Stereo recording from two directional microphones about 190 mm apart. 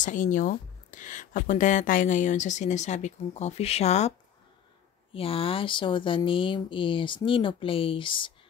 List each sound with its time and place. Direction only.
0.0 s speech: 40° left (ahead or behind)
5.1 s speech: 30° left (ahead or behind)